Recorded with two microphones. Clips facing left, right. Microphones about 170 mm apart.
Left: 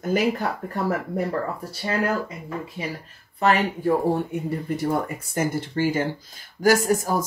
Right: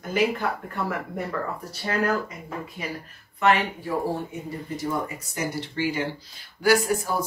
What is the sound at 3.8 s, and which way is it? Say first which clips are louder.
Speech: left 9 dB; 60° left (ahead or behind).